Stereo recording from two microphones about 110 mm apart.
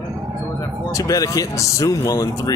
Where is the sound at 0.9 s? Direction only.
30° left (ahead or behind).